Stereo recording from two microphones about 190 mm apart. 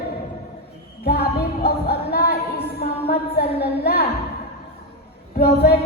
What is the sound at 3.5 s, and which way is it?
Speech, 55° left (ahead or behind).